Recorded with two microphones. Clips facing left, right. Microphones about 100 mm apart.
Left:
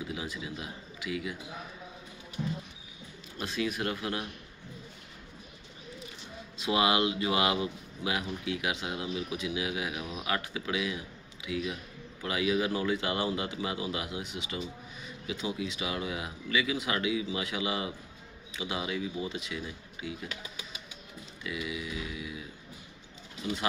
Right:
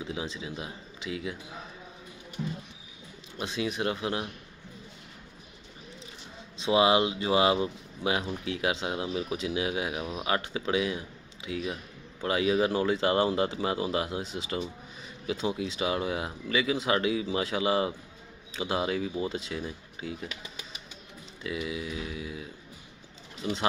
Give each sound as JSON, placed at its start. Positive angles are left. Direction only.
{"t": 0.0, "sound": "speech", "side_deg": -25}
{"t": 3.3, "sound": "speech", "side_deg": -20}
{"t": 6.6, "sound": "speech", "side_deg": -25}
{"t": 21.5, "sound": "speech", "side_deg": -30}